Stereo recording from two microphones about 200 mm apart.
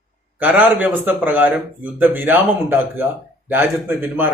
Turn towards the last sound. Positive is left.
turn(degrees=-10)  # may be behind; listen again after turning